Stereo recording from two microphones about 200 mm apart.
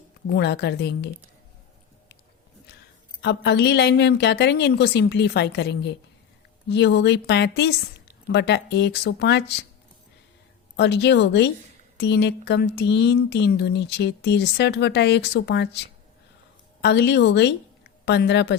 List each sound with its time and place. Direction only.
0.3 s speech: 60° left (ahead or behind)
3.2 s speech: 55° left (ahead or behind)
10.8 s speech: 60° left (ahead or behind)
16.8 s speech: 60° left (ahead or behind)